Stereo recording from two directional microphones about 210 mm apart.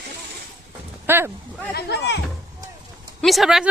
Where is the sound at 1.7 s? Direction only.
55° left (ahead or behind).